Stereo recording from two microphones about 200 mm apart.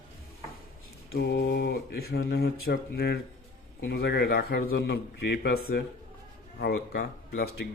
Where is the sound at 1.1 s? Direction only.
60° left (ahead or behind).